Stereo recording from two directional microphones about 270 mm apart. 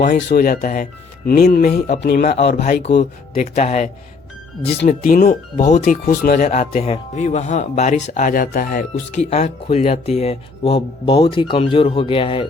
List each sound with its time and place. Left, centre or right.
0.0 s speech: left; by 12.5 s centre